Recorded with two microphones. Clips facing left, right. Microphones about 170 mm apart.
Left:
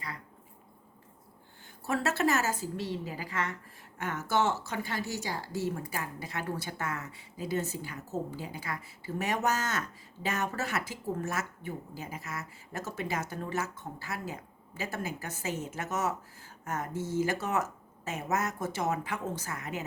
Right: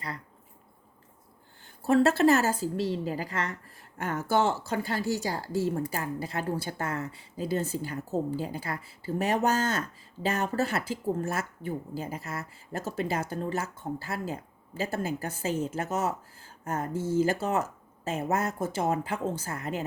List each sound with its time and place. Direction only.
1.8 s a woman's voice: 30° right (ahead or behind)